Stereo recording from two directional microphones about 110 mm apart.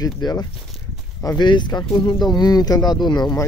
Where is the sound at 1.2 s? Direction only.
40° left (ahead or behind).